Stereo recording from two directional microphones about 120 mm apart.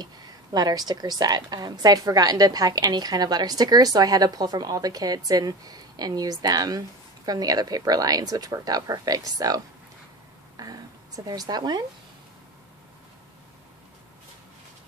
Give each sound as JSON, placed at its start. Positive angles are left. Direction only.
{"t": 0.0, "sound": "a woman's voice", "side_deg": -35}
{"t": 10.6, "sound": "a woman's voice", "side_deg": -30}